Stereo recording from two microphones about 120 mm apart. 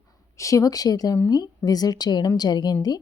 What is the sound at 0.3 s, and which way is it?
A woman's voice, 25° left (ahead or behind).